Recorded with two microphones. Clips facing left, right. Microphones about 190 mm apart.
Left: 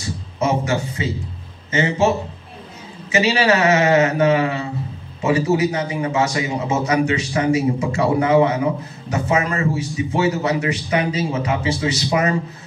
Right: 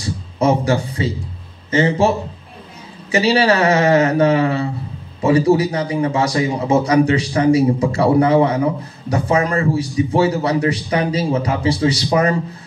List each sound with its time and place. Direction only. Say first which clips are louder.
0.0 s a man's voice: right 4 dB; 30° right (ahead or behind)